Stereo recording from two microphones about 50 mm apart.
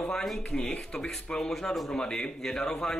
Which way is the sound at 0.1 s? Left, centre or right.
Centre.